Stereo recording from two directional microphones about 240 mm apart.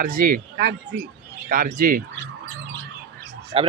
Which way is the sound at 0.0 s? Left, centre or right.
Right.